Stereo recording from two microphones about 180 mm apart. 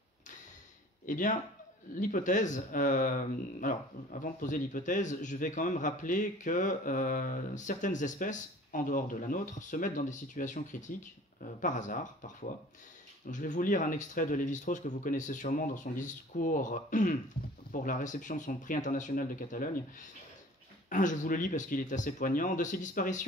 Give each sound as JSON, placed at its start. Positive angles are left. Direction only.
{"t": 1.0, "sound": "speech", "side_deg": 45}